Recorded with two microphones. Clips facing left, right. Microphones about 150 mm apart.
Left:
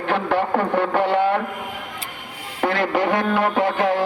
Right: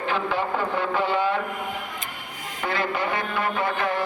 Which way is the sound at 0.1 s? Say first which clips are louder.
Left 6 dB; 65° left (ahead or behind).